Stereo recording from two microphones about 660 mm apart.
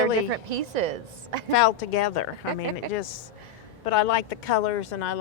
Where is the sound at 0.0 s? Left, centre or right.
Right.